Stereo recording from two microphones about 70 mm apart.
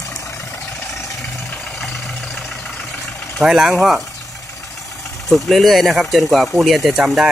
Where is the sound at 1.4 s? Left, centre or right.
Centre.